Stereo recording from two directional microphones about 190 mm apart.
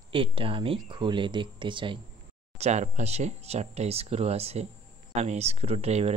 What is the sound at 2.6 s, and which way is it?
Speech, 35° right (ahead or behind).